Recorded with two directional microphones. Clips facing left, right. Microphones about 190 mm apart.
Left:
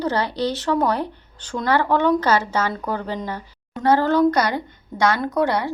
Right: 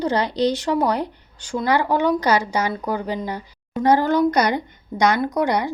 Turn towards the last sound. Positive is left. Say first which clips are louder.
# even
turn(degrees=-15)  # may be behind; listen again after turning